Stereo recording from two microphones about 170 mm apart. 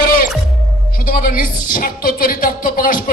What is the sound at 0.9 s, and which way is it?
A woman's voice, 55° left (ahead or behind).